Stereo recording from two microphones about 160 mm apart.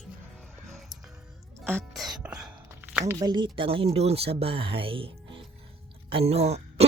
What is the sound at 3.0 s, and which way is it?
Speech, 25° right (ahead or behind).